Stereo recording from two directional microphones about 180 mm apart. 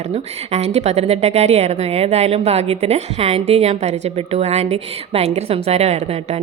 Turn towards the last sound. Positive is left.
turn(degrees=-35)  # may be behind; listen again after turning